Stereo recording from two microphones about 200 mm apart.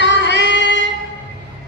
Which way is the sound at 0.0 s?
60° left (ahead or behind).